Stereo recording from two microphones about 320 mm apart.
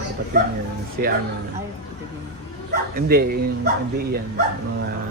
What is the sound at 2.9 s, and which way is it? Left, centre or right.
Speech, right.